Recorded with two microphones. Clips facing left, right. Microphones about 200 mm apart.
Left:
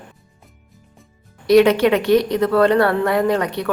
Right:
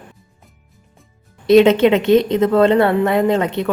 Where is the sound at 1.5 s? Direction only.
25° right (ahead or behind).